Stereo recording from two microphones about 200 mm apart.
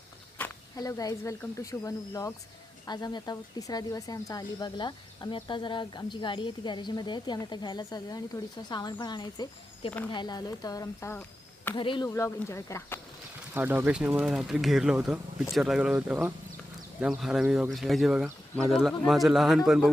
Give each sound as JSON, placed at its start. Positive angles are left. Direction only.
{"t": 0.3, "sound": "speech", "side_deg": 15}
{"t": 11.7, "sound": "speech", "side_deg": 25}
{"t": 13.5, "sound": "speech", "side_deg": -10}